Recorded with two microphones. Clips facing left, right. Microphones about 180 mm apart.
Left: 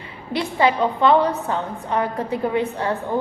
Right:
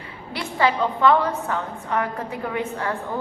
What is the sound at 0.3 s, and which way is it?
A woman's voice, 20° left (ahead or behind).